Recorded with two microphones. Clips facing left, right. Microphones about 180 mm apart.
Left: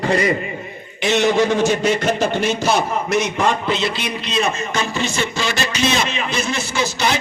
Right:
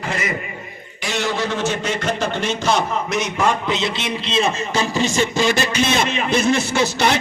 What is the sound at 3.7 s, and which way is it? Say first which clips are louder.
A man's voice: left 1 dB; 20° right (ahead or behind).